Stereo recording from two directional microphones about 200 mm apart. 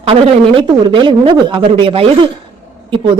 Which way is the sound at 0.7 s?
25° right (ahead or behind).